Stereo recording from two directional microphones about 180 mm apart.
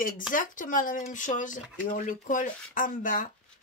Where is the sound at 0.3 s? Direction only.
50° left (ahead or behind).